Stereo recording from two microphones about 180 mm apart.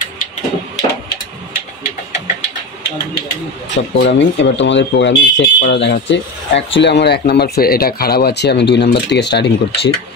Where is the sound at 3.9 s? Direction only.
75° left (ahead or behind).